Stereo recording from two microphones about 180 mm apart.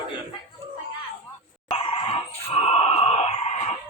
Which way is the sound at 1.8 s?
30° left (ahead or behind).